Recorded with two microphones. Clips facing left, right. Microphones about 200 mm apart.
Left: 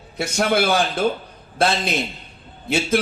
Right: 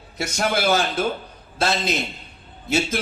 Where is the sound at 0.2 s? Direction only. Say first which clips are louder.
Left 3 dB; 55° left (ahead or behind).